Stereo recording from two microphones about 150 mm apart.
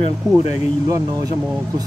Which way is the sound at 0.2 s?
25° right (ahead or behind).